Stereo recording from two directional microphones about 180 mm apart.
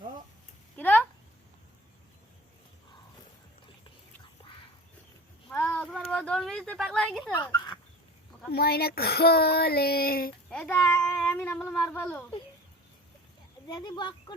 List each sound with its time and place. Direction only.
0.8 s a sound: 10° left (ahead or behind)
5.5 s a sound: 10° left (ahead or behind)
7.4 s speech: 25° left (ahead or behind)
8.5 s speech: 60° left (ahead or behind)
10.5 s speech: 5° left (ahead or behind)
13.7 s speech: 25° left (ahead or behind)